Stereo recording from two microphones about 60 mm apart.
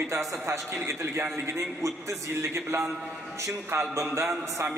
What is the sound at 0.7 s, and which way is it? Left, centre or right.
Speech, right.